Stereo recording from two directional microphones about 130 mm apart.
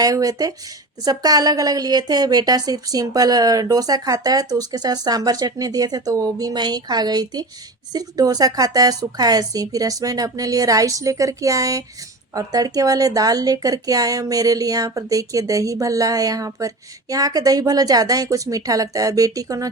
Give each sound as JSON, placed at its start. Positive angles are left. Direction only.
{"t": 0.0, "sound": "speech", "side_deg": -25}